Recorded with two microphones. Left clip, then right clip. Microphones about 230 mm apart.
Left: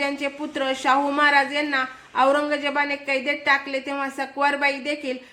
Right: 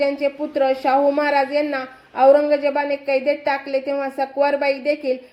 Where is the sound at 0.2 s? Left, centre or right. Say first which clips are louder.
Right 7 dB; centre.